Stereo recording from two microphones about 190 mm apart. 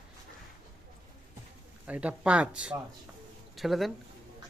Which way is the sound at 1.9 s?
5° right (ahead or behind).